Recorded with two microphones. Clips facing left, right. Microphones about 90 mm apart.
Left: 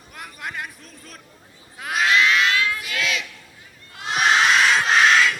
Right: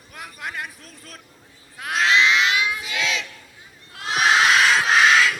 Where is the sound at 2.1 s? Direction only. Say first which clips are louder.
Even; 15° right (ahead or behind).